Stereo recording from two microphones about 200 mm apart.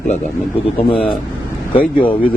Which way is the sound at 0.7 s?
25° left (ahead or behind).